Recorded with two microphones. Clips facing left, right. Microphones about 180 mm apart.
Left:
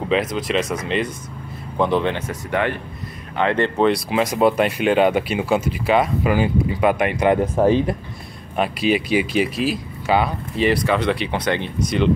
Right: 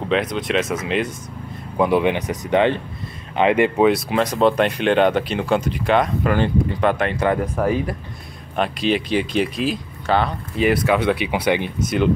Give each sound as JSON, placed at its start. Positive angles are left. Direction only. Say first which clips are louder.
{"t": 0.0, "sound": "speech", "louder": "even", "side_deg": 0}
{"t": 4.2, "sound": "speech", "louder": "even", "side_deg": 10}
{"t": 8.5, "sound": "speech", "louder": "left 1 dB", "side_deg": 5}
{"t": 10.6, "sound": "speech", "louder": "right 1 dB", "side_deg": -5}